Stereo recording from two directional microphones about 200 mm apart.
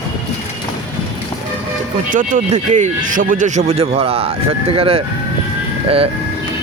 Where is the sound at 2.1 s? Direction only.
40° right (ahead or behind).